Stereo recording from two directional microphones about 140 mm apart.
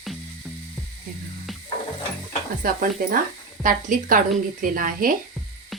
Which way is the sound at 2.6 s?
90° right.